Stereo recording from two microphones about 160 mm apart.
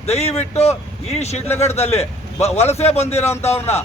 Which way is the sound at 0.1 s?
40° left (ahead or behind).